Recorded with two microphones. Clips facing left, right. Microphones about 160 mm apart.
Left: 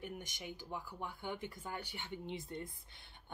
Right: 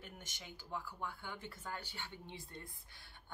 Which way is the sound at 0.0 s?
15° left (ahead or behind).